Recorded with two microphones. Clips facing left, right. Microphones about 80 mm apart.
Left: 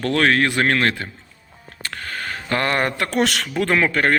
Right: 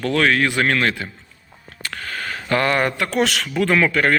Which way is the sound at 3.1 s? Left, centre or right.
Left.